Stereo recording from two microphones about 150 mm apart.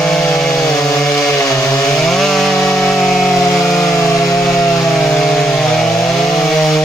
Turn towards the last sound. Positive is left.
turn(degrees=0)  # may be behind; listen again after turning